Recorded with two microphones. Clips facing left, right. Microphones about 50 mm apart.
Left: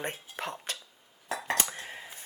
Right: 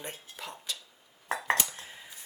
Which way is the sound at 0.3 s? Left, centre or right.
Left.